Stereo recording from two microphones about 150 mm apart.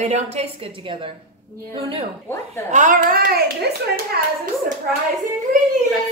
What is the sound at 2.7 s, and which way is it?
A child's voice, 60° right (ahead or behind).